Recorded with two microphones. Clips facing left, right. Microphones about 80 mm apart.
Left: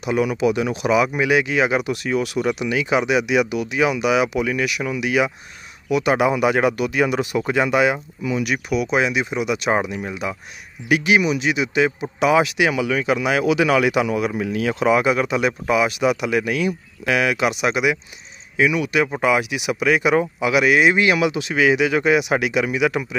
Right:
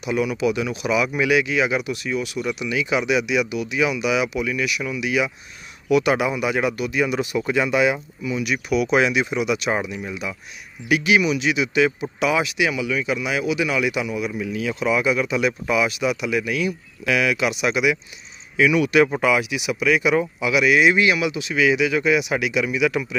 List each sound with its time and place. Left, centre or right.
0.0 s speech: left
5.9 s a man's voice: left
6.1 s speech: left
7.3 s speech: left
8.9 s speech: left
9.3 s speech: left
15.3 s speech: left
18.6 s speech: left
19.5 s speech: left